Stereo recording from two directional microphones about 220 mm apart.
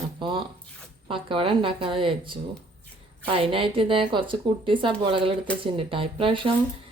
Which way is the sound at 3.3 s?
25° right (ahead or behind).